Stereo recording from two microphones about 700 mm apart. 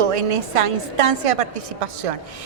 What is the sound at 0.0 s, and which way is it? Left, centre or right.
A woman's voice, right.